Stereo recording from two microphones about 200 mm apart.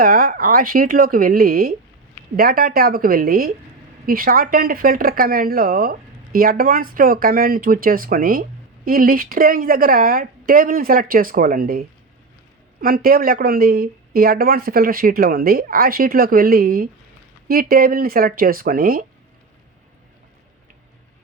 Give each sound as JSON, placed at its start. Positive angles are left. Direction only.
{"t": 0.0, "sound": "speech", "side_deg": -45}